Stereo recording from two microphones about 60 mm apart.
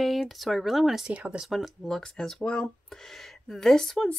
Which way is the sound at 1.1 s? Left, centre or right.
Right.